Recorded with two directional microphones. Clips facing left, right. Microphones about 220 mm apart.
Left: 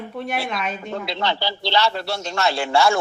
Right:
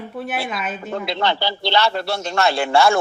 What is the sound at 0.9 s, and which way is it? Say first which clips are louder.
A man's voice: right 4 dB; 55° right (ahead or behind).